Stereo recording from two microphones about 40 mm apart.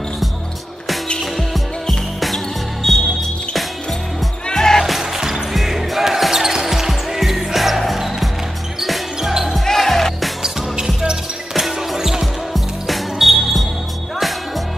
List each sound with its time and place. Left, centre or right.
1.2 s basketball bounce: centre
4.5 s music: centre
4.8 s music: centre
5.2 s basketball bounce: centre
9.7 s music: centre
11.5 s music: centre